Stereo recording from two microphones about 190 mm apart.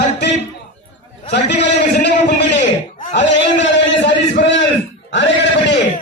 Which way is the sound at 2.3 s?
45° left (ahead or behind).